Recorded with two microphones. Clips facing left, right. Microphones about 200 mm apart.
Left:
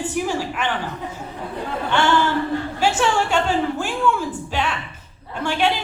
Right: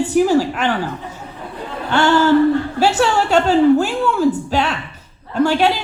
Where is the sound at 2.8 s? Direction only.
40° right (ahead or behind).